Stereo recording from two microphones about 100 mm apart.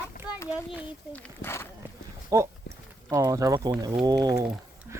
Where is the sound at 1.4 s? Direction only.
25° left (ahead or behind).